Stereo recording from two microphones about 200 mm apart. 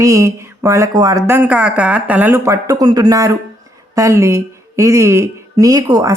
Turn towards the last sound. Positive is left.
turn(degrees=-20)  # may be behind; listen again after turning